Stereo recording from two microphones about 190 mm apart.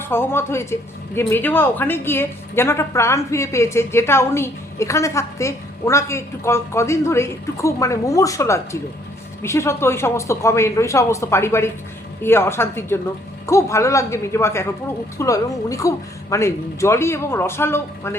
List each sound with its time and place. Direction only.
0.1 s speech: 10° left (ahead or behind)